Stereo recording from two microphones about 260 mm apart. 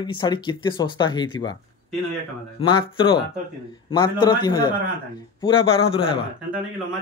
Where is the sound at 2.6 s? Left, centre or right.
Centre.